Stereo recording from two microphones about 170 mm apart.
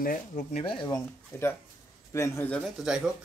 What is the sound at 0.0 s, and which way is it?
Speech, 55° left (ahead or behind).